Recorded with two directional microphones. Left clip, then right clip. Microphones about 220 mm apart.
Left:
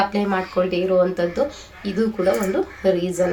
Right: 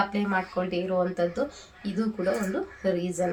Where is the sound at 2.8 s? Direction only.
10° left (ahead or behind).